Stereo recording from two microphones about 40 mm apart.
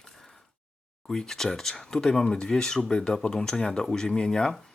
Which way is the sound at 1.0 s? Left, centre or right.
Centre.